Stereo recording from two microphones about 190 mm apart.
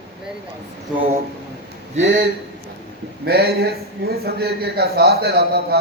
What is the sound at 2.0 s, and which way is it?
Speech, 70° right (ahead or behind).